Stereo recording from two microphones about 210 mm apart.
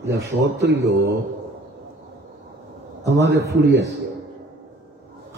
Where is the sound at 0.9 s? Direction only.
50° right (ahead or behind).